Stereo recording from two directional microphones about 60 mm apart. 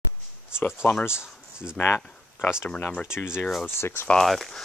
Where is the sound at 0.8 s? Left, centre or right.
Left.